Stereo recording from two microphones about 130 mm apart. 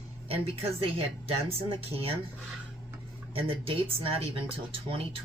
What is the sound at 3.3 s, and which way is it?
Speech, 45° right (ahead or behind).